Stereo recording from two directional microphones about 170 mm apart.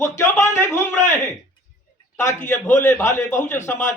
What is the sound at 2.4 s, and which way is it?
A man's voice, 10° left (ahead or behind).